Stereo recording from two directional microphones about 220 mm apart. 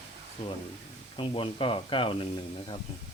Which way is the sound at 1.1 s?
25° left (ahead or behind).